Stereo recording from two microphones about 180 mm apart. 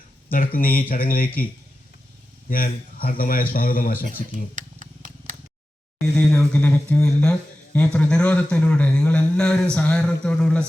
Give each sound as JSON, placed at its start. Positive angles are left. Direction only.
{"t": 0.3, "sound": "speech", "side_deg": 50}
{"t": 2.5, "sound": "speech", "side_deg": 55}
{"t": 4.5, "sound": "a sound", "side_deg": -45}
{"t": 6.1, "sound": "speech", "side_deg": 5}